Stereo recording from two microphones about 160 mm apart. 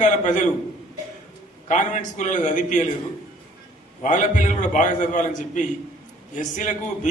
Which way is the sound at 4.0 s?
50° left (ahead or behind).